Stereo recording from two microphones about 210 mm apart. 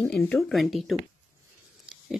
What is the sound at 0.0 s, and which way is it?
Speech, 5° left (ahead or behind).